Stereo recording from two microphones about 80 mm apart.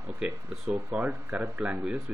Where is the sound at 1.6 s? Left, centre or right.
Centre.